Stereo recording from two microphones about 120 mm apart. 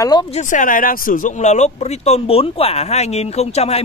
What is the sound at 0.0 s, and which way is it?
Speech, 35° left (ahead or behind).